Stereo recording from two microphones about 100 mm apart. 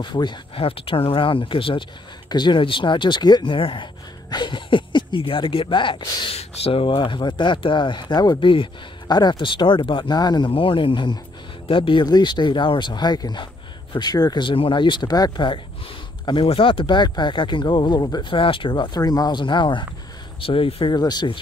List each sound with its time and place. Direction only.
0.0 s speech: 50° left (ahead or behind)
6.3 s speech: 75° left (ahead or behind); by 8.6 s 55° left (ahead or behind)
9.0 s speech: 45° left (ahead or behind)
10.5 s speech: 60° left (ahead or behind); by 15.4 s 40° left (ahead or behind)
16.4 s speech: 65° left (ahead or behind); by 18.4 s 45° left (ahead or behind)
18.4 s speech: 60° left (ahead or behind)
18.9 s speech: 40° left (ahead or behind)
20.3 s speech: 65° left (ahead or behind)
20.9 s speech: 45° left (ahead or behind)